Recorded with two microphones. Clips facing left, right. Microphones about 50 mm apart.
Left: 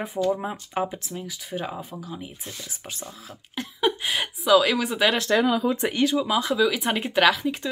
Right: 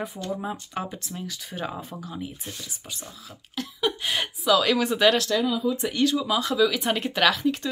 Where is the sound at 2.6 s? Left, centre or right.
Left.